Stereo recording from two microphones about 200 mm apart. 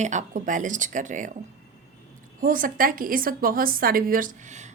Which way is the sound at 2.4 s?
45° right (ahead or behind).